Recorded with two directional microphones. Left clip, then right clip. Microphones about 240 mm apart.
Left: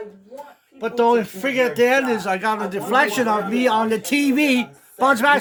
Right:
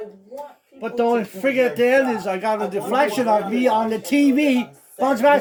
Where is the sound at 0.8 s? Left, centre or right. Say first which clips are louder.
Left 3 dB; left.